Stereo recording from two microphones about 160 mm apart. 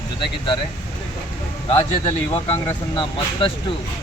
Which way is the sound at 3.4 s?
35° left (ahead or behind).